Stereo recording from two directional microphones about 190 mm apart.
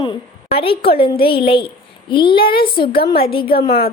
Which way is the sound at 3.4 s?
55° left (ahead or behind).